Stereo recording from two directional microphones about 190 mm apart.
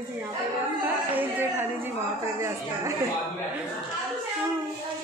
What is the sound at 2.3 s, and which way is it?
Speech, 15° right (ahead or behind).